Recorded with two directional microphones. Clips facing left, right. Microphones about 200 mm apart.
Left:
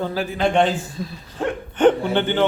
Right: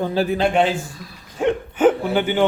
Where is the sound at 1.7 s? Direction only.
5° right (ahead or behind).